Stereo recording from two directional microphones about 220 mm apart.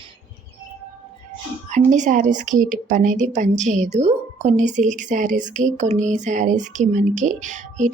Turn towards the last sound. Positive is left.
turn(degrees=-35)  # may be behind; listen again after turning